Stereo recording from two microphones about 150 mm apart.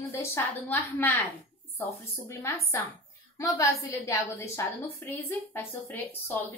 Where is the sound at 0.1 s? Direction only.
15° left (ahead or behind).